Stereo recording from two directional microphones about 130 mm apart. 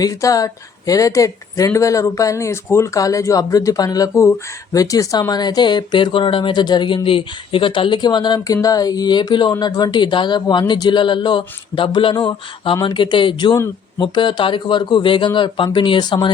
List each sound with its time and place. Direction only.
0.0 s speech: 25° left (ahead or behind)